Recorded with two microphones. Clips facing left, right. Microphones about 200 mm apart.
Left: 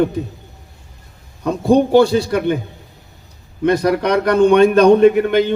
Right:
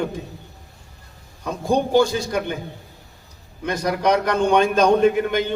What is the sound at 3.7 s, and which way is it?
A man's voice, 60° left (ahead or behind).